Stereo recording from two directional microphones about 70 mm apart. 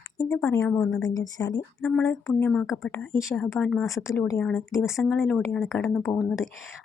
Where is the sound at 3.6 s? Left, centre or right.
Centre.